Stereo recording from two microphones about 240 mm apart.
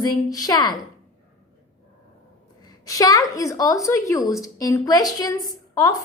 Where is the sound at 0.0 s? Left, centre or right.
Centre.